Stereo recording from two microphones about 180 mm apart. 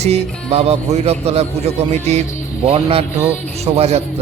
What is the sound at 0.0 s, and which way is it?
Speech, 35° right (ahead or behind).